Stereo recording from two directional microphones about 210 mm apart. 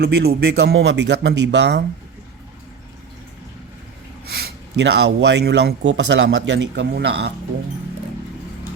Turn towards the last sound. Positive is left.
turn(degrees=-55)  # may be behind; listen again after turning